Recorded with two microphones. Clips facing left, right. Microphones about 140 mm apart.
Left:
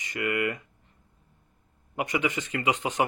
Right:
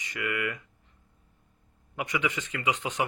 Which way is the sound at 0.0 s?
35° left (ahead or behind).